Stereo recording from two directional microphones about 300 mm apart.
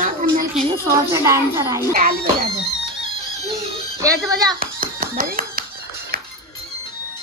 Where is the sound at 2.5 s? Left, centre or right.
Centre.